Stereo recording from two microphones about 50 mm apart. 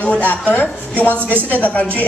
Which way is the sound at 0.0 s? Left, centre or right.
Left.